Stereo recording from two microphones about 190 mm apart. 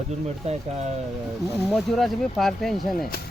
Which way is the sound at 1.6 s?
Centre (ahead or behind).